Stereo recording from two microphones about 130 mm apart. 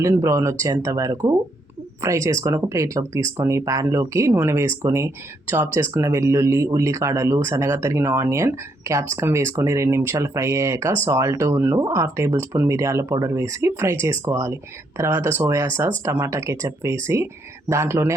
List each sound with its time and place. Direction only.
0.0 s speech: 25° right (ahead or behind)